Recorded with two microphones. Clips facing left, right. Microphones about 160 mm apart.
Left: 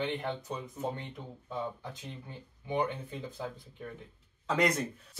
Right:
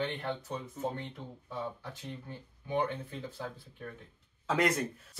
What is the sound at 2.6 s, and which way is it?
Speech, 15° left (ahead or behind).